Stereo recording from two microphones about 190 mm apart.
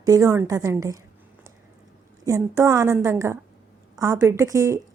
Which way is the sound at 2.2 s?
15° right (ahead or behind).